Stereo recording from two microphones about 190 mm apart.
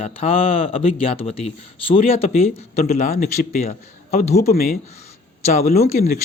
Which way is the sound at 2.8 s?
50° left (ahead or behind).